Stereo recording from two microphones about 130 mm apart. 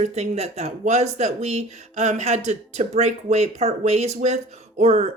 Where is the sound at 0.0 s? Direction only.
55° right (ahead or behind).